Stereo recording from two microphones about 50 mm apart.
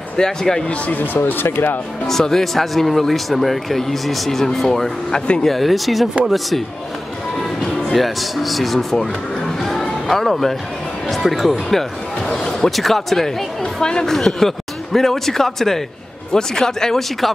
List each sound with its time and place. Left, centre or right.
0.2 s speech: centre
0.9 s speech: left
2.0 s speech: centre
7.9 s speech: centre
9.6 s a sound: centre
10.1 s speech: centre